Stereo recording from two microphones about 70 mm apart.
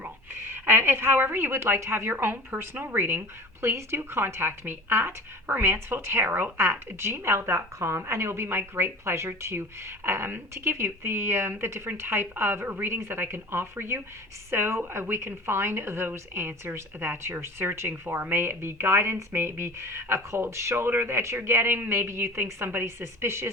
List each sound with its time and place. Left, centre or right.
0.0 s a woman's voice: right